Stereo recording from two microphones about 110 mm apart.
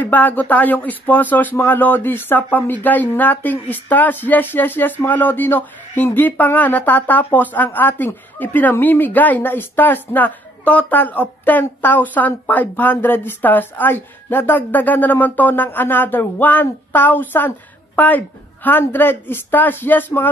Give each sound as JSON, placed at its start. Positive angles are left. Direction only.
{"t": 0.0, "sound": "speech", "side_deg": 15}